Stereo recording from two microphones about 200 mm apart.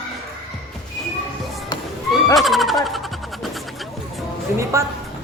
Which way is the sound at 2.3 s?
Centre (ahead or behind).